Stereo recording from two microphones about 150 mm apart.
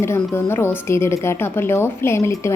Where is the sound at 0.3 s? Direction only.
15° left (ahead or behind).